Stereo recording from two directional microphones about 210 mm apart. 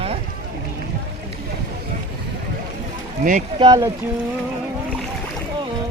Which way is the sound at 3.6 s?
20° right (ahead or behind).